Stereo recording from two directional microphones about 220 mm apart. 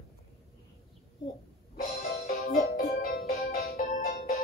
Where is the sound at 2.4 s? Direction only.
40° left (ahead or behind).